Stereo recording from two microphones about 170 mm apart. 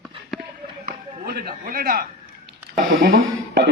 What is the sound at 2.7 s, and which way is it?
Speech, 65° right (ahead or behind).